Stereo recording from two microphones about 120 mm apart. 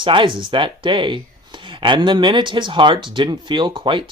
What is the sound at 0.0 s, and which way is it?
Speech, 45° right (ahead or behind).